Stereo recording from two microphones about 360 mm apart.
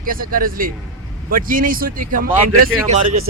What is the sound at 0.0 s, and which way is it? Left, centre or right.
Speech, right.